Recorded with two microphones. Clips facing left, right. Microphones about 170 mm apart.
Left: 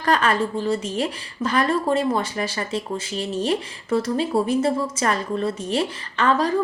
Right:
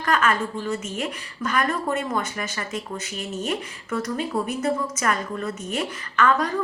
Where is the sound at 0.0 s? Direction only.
35° left (ahead or behind).